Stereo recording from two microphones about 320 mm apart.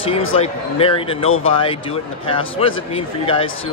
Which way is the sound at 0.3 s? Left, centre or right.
Centre.